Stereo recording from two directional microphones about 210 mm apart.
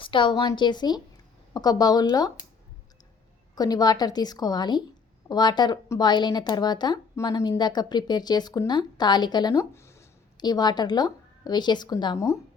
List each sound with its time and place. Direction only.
0.0 s a woman's voice: 25° left (ahead or behind)
3.5 s speech: 20° left (ahead or behind)